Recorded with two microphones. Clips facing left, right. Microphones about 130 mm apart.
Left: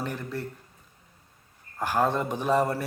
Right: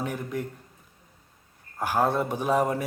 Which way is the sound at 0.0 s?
10° right (ahead or behind).